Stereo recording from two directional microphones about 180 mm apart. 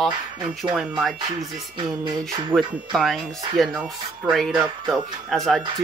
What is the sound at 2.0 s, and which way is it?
Speech, 20° right (ahead or behind).